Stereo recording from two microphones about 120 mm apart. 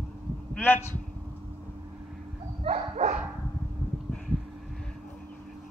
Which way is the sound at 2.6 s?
70° right (ahead or behind).